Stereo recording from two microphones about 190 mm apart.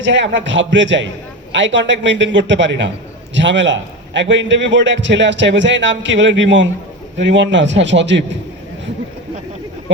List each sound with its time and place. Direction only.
0.0 s a man's voice: 75° right (ahead or behind)